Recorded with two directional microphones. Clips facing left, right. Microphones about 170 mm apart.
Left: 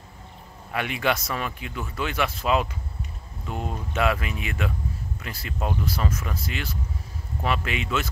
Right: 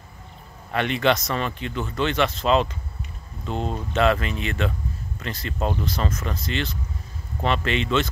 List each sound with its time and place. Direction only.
0.7 s speech: 10° left (ahead or behind)
3.4 s speech: 25° right (ahead or behind)
3.9 s speech: 10° left (ahead or behind)